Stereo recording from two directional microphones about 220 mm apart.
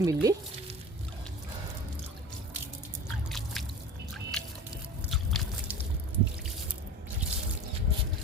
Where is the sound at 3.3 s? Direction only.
Centre (ahead or behind).